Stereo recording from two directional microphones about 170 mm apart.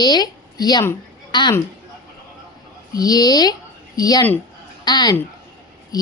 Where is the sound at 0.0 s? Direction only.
25° left (ahead or behind).